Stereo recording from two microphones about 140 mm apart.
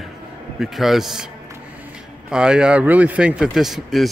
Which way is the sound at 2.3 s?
5° right (ahead or behind).